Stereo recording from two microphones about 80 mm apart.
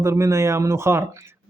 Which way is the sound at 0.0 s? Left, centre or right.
Right.